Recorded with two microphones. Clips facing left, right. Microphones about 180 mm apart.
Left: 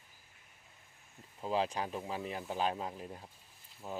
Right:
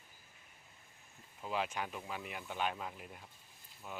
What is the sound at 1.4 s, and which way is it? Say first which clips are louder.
Speech: left 4 dB; 35° left (ahead or behind).